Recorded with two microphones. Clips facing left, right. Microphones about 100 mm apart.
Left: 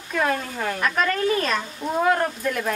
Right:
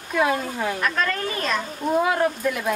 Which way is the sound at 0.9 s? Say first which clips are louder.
Left 4 dB; 10° left (ahead or behind).